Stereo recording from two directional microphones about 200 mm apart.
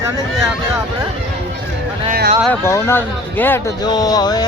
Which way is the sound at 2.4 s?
15° left (ahead or behind).